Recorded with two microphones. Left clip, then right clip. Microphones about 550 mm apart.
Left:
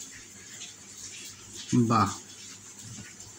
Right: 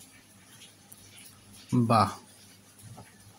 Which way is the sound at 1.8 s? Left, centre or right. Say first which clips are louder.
Right 2 dB; right.